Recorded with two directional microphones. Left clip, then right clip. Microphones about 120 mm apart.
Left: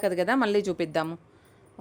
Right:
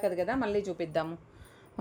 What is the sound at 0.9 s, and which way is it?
Speech, 40° left (ahead or behind).